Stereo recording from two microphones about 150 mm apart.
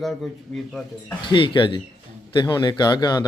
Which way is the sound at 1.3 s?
30° left (ahead or behind).